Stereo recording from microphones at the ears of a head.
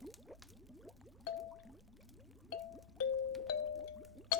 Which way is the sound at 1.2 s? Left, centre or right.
Left.